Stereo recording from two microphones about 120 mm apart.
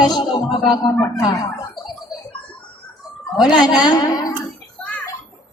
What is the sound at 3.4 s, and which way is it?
Speech, 35° left (ahead or behind).